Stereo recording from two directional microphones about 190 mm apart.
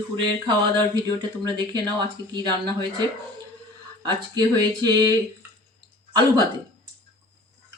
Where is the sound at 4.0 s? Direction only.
20° right (ahead or behind).